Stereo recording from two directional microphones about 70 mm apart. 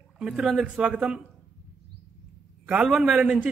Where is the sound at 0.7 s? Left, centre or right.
Centre.